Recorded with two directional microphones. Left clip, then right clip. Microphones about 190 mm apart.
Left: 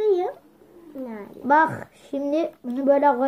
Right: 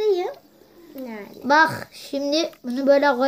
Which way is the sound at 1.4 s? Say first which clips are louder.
Right 1 dB; 20° right (ahead or behind).